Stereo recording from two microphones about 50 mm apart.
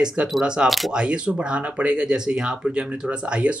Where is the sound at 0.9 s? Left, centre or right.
Centre.